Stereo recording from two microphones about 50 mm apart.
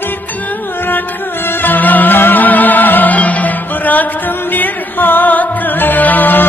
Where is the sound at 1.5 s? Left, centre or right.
Left.